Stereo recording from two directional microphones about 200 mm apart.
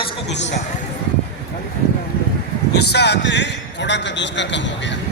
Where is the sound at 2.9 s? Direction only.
60° left (ahead or behind).